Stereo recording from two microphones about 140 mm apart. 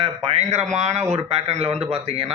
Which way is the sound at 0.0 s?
50° right (ahead or behind).